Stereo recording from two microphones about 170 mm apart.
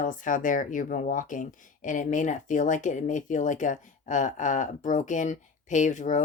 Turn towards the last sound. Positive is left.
turn(degrees=45)  # may be behind; listen again after turning